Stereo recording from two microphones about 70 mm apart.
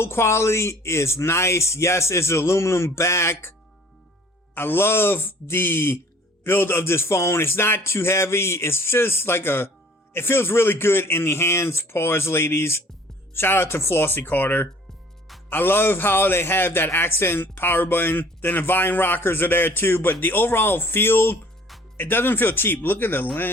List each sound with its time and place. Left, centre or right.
0.0 s a man's voice: left
4.5 s a man's voice: left